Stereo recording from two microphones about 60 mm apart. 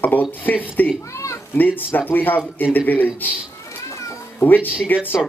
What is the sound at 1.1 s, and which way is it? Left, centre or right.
Speech, left.